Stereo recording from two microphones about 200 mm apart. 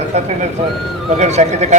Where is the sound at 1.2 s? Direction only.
35° right (ahead or behind).